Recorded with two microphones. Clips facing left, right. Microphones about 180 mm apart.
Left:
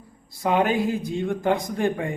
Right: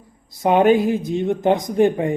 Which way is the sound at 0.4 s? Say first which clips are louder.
Right 7 dB; 25° right (ahead or behind).